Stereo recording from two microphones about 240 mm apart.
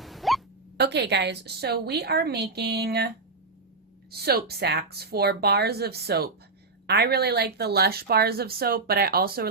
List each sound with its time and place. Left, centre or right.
0.0 s hiccup: centre
0.8 s a woman's voice: right
4.1 s a woman's voice: right